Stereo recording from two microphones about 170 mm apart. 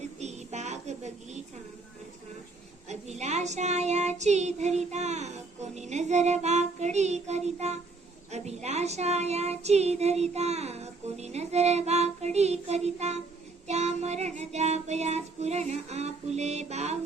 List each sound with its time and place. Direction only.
0.2 s child singing: 40° right (ahead or behind)
2.9 s child singing: 40° right (ahead or behind)